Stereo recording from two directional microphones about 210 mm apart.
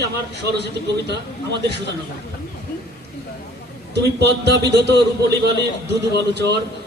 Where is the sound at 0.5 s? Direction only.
55° right (ahead or behind).